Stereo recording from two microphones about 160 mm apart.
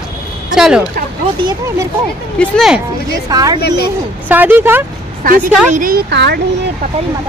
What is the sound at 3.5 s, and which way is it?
Speech, 90° left.